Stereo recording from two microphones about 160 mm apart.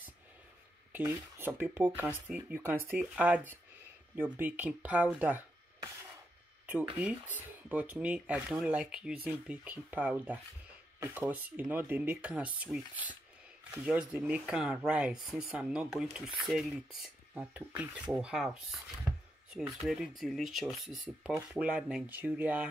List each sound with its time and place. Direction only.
0.9 s speech: 10° right (ahead or behind)
6.6 s speech: 10° right (ahead or behind)